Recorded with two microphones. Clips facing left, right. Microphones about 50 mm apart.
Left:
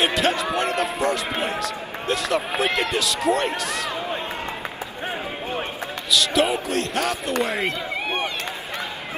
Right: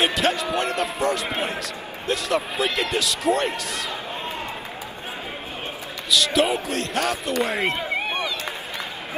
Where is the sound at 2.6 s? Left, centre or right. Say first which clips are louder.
Left 1 dB; left.